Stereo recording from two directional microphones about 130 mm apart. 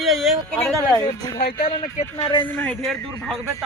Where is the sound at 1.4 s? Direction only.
50° left (ahead or behind).